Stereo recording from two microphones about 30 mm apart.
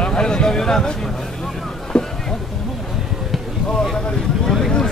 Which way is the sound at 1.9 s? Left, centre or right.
Left.